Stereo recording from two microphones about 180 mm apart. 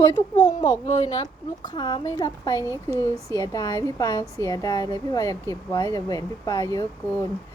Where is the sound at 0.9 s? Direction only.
25° left (ahead or behind).